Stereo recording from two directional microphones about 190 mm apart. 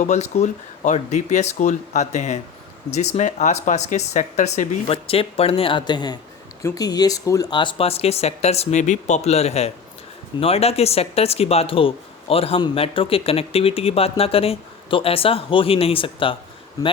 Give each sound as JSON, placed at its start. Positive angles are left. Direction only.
{"t": 0.0, "sound": "speech", "side_deg": 35}